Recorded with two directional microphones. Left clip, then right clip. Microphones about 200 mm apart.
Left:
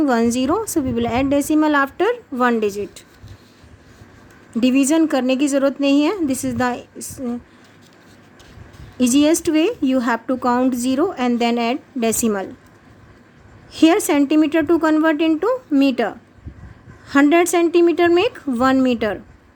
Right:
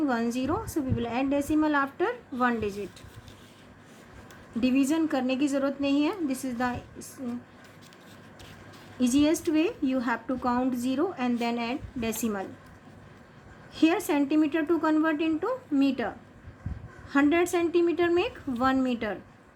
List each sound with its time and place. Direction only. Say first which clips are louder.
0.0 s speech: left 11 dB; 50° left (ahead or behind)
4.6 s speech: left 10 dB; 50° left (ahead or behind)
9.0 s speech: left 9 dB; 50° left (ahead or behind)
13.7 s speech: left 10 dB; 50° left (ahead or behind)